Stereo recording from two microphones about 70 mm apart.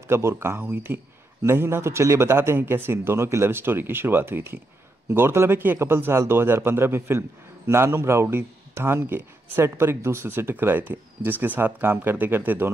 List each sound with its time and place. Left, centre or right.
0.1 s a man's voice: right